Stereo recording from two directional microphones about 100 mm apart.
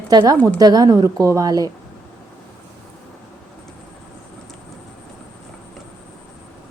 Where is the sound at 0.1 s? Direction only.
40° right (ahead or behind).